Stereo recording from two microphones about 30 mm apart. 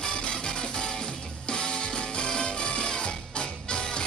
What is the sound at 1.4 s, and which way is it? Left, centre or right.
Music, left.